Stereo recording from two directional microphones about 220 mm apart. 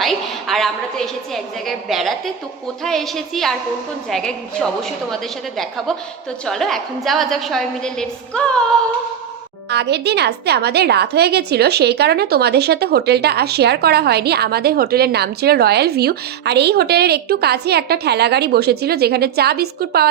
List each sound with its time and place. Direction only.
0.0 s a woman's voice: centre (ahead or behind)
6.4 s a woman's voice: centre (ahead or behind)
9.6 s a woman's voice: 50° right (ahead or behind)